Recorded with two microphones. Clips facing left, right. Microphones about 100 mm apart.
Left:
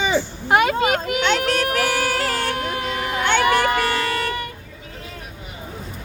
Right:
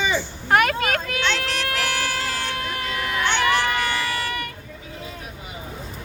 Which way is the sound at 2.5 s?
20° left (ahead or behind).